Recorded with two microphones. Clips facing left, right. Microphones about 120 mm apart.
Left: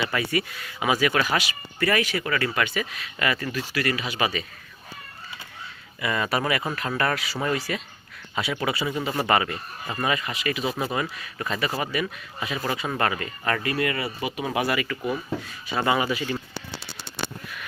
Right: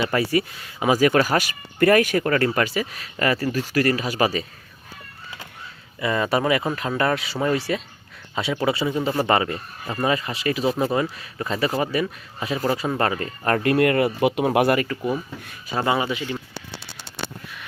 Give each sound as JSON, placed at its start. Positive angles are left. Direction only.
{"t": 0.0, "sound": "speech", "side_deg": -35}
{"t": 6.0, "sound": "speech", "side_deg": -30}
{"t": 15.8, "sound": "speech", "side_deg": -25}